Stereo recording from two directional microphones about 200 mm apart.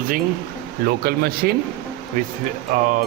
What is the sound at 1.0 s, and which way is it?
Speech, 50° right (ahead or behind).